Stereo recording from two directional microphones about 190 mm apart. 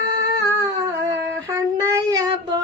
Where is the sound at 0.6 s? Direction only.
15° right (ahead or behind).